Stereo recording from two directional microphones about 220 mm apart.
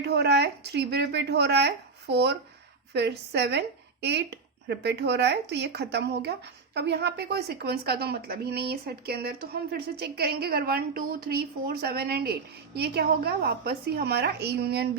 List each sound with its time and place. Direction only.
0.0 s speech: 50° right (ahead or behind)